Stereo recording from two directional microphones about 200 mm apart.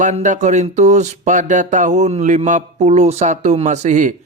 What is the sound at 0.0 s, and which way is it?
Speech, 40° right (ahead or behind).